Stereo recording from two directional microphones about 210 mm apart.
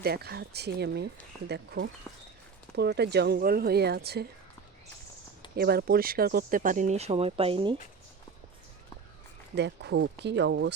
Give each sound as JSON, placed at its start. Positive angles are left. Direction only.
{"t": 0.0, "sound": "speech", "side_deg": -50}
{"t": 5.5, "sound": "speech", "side_deg": -45}
{"t": 9.6, "sound": "speech", "side_deg": -55}